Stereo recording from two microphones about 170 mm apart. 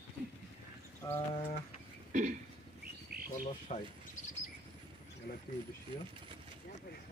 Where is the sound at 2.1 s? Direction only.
45° right (ahead or behind).